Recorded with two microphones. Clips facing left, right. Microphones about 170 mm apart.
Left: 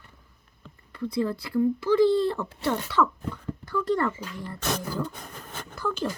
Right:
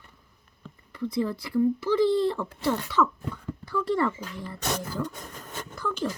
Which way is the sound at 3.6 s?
5° right (ahead or behind).